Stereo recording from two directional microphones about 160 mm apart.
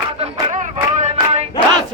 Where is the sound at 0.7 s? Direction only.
45° right (ahead or behind).